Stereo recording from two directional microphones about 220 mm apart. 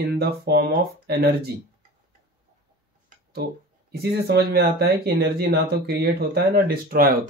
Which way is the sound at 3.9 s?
45° right (ahead or behind).